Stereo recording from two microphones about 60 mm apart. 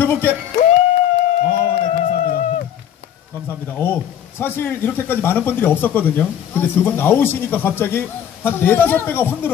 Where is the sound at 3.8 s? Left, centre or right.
Left.